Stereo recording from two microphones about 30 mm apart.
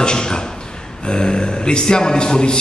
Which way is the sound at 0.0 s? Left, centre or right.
Left.